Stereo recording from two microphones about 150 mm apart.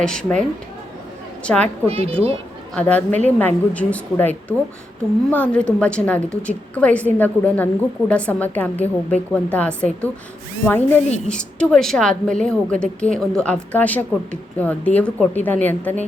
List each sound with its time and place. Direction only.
0.0 s a woman's voice: 5° left (ahead or behind)
1.6 s a woman's voice: 40° right (ahead or behind)
2.7 s a woman's voice: 10° left (ahead or behind)